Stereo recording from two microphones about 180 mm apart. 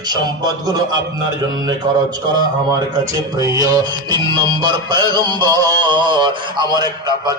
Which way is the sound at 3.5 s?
20° right (ahead or behind).